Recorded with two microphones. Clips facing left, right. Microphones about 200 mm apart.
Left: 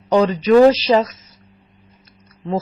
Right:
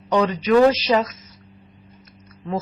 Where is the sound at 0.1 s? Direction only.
35° left (ahead or behind).